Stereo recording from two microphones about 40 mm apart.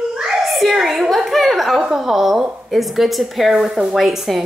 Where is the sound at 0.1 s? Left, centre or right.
Centre.